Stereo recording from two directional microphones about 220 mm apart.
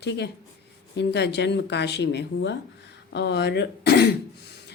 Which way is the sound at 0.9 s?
50° left (ahead or behind).